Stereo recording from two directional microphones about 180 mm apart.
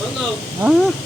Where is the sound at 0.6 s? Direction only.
5° right (ahead or behind).